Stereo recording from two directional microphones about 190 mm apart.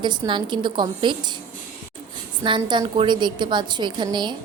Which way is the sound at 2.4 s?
25° right (ahead or behind).